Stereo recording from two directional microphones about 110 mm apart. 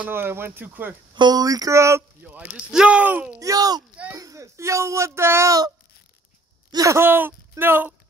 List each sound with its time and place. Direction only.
0.0 s speech: 20° right (ahead or behind)
1.1 s speech: 40° right (ahead or behind)
2.2 s speech: 10° right (ahead or behind)
3.3 s speech: 35° right (ahead or behind)
6.7 s speech: 30° right (ahead or behind)